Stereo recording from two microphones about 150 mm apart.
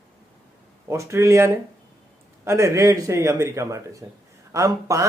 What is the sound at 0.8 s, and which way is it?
Speech, 20° right (ahead or behind).